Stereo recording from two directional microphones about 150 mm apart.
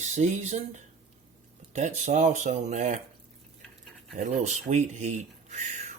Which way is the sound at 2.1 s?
55° right (ahead or behind).